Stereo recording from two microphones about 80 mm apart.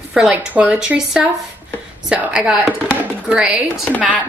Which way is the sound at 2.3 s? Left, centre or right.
Centre.